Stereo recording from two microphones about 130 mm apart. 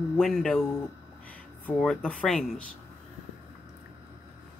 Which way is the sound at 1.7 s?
5° left (ahead or behind).